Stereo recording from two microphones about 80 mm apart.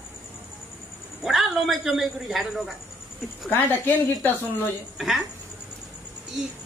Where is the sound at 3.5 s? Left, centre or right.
Left.